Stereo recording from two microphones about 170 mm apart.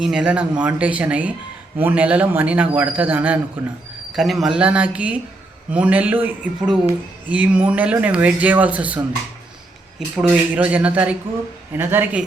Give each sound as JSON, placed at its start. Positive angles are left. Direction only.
{"t": 0.0, "sound": "speech", "side_deg": -5}
{"t": 10.2, "sound": "speech", "side_deg": -10}